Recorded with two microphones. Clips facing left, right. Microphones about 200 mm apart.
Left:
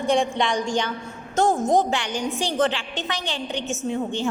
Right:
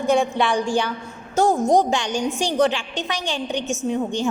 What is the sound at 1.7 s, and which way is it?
A man's voice, 15° right (ahead or behind).